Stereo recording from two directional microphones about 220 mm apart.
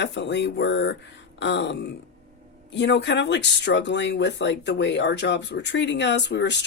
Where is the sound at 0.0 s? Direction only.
55° left (ahead or behind).